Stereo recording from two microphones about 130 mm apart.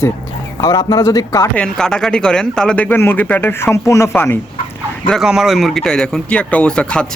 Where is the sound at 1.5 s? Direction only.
5° left (ahead or behind).